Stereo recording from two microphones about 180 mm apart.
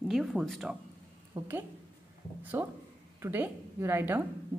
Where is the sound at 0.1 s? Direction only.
Centre (ahead or behind).